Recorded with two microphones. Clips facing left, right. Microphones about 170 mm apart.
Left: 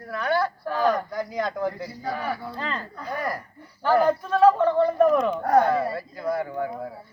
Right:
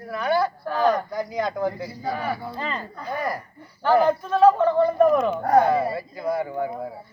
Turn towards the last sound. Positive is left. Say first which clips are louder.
# right 2 dB
turn(degrees=-10)  # may be behind; listen again after turning